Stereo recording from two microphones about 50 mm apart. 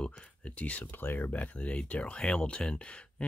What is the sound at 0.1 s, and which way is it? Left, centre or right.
Speech, left.